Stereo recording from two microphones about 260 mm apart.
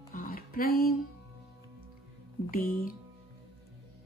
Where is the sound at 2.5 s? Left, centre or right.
Left.